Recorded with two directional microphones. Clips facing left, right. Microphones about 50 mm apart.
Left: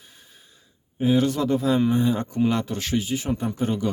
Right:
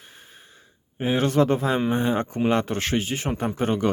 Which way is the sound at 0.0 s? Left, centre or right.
Right.